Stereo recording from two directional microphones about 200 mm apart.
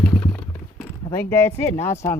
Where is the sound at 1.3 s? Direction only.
10° left (ahead or behind).